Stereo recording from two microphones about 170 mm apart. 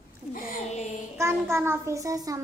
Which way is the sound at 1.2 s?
15° right (ahead or behind).